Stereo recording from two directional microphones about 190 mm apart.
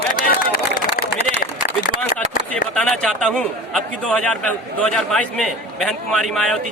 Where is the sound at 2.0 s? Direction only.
5° left (ahead or behind).